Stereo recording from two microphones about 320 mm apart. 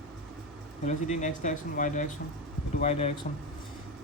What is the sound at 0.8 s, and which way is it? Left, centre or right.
Speech, left.